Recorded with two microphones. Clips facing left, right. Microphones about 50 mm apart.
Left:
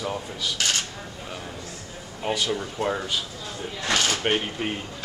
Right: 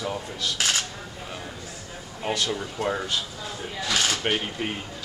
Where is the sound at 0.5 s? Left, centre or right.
Centre.